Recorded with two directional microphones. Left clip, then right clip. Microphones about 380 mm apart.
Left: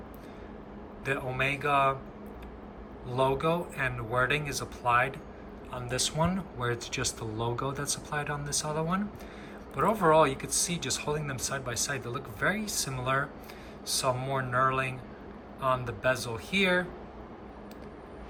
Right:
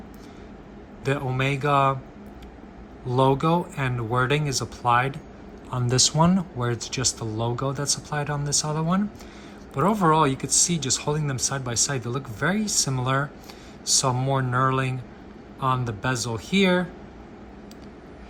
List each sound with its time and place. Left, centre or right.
1.0 s speech: centre
3.1 s speech: centre